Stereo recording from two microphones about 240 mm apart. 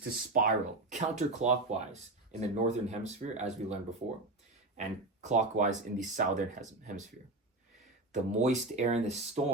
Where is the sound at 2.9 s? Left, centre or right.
Right.